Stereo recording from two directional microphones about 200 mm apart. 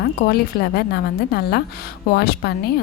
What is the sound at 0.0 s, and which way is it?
A woman's voice, 50° left (ahead or behind).